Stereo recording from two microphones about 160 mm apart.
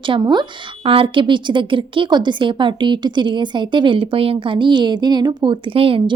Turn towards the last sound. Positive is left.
turn(degrees=-35)  # may be behind; listen again after turning